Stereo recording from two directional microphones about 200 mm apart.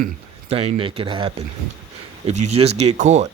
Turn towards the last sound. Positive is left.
turn(degrees=-35)  # may be behind; listen again after turning